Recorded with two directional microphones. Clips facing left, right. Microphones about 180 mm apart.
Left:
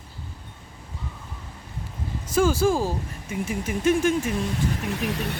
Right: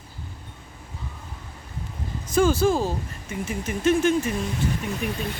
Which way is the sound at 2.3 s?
10° left (ahead or behind).